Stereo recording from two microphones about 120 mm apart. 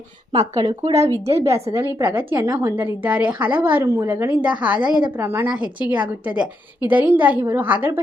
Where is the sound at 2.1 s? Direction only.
15° right (ahead or behind).